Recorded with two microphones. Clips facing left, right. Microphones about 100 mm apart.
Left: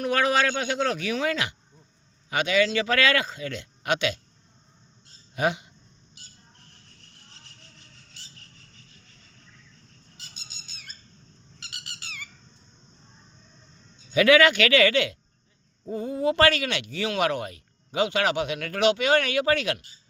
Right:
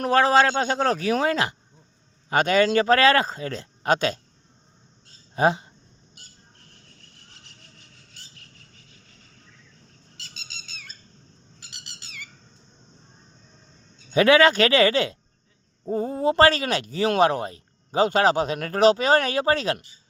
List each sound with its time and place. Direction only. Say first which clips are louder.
0.0 s speech: right 5 dB; 35° right (ahead or behind)
5.3 s speech: right 5 dB; 35° right (ahead or behind)
6.2 s cricket: right 1 dB; 50° right (ahead or behind)
10.2 s bird: right 5 dB; 90° right
14.1 s speech: right 2 dB; 35° right (ahead or behind)